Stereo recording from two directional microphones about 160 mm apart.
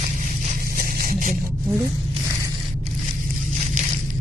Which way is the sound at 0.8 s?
65° right (ahead or behind).